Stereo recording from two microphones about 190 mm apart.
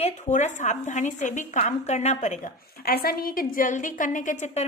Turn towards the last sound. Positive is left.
turn(degrees=40)  # may be behind; listen again after turning